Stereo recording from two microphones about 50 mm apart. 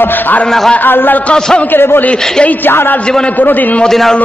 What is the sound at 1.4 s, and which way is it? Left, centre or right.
Speech, centre.